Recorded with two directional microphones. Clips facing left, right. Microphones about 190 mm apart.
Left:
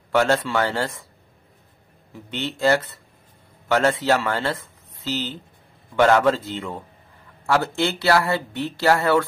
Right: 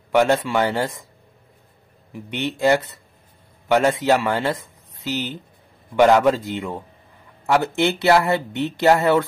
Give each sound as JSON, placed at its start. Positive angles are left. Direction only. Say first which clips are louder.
{"t": 0.1, "sound": "a man's voice", "louder": "right 2 dB", "side_deg": -15}
{"t": 2.1, "sound": "a man's voice", "louder": "right 3 dB", "side_deg": -15}